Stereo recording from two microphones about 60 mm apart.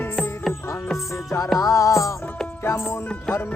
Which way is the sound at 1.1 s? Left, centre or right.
Left.